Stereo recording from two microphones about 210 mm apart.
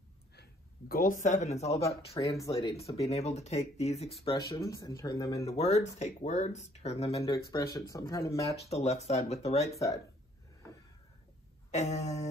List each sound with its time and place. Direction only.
0.4 s speech: 45° left (ahead or behind)
2.0 s speech: 15° left (ahead or behind)
2.7 s speech: 30° left (ahead or behind)
4.4 s speech: 15° left (ahead or behind)
5.5 s speech: 30° left (ahead or behind)
7.5 s speech: 15° left (ahead or behind)
8.6 s speech: 30° left (ahead or behind)
11.7 s speech: 30° left (ahead or behind)